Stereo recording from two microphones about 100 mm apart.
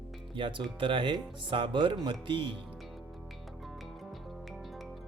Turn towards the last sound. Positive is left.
turn(degrees=0)  # may be behind; listen again after turning